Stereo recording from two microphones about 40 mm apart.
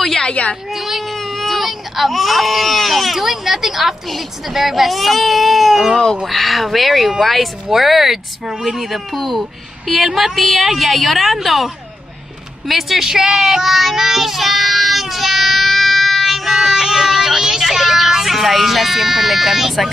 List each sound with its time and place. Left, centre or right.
0.3 s a woman's voice: left
0.7 s a woman's voice: centre